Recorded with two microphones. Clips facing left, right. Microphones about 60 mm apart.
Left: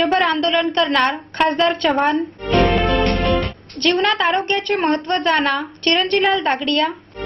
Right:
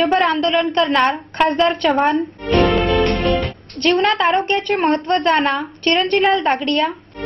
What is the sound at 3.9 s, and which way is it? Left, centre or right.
Speech, centre.